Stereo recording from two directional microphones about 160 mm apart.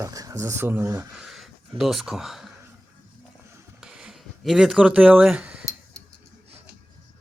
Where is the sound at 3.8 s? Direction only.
5° right (ahead or behind).